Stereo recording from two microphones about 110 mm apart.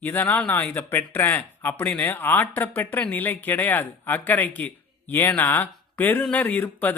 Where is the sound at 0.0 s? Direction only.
20° left (ahead or behind).